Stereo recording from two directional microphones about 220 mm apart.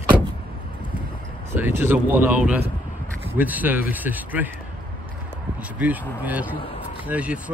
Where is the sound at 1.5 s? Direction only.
10° right (ahead or behind).